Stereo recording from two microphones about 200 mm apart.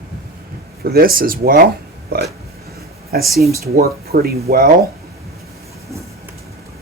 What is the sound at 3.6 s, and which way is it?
Speech, 50° right (ahead or behind).